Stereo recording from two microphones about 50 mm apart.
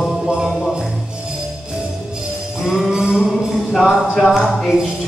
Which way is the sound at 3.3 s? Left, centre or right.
Centre.